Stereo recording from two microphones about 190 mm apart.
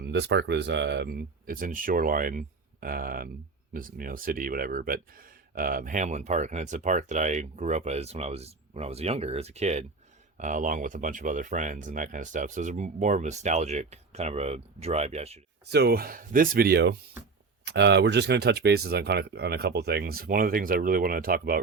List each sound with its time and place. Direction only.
0.0 s speech: 65° right (ahead or behind); by 15.4 s 35° right (ahead or behind)
15.7 s speech: 55° right (ahead or behind)